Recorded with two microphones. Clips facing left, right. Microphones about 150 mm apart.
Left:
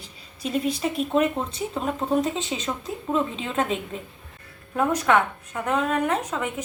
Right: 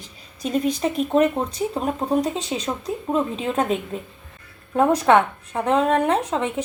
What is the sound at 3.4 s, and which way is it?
Speech, 40° right (ahead or behind).